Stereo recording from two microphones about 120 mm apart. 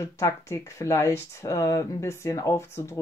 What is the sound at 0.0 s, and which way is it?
Speech, 25° left (ahead or behind).